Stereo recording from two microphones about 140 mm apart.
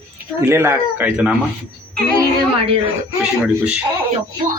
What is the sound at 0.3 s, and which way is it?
Speech, 20° right (ahead or behind).